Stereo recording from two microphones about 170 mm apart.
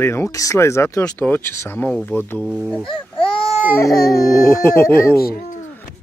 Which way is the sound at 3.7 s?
20° left (ahead or behind).